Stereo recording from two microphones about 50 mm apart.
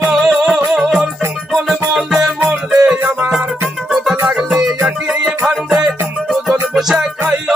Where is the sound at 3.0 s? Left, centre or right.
Right.